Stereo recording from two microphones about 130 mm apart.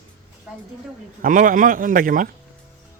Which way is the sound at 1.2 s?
90° right.